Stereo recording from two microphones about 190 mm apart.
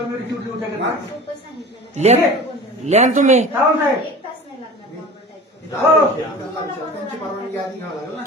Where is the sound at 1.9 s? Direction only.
35° right (ahead or behind).